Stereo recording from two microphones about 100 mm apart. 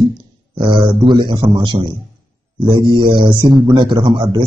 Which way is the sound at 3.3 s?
40° right (ahead or behind).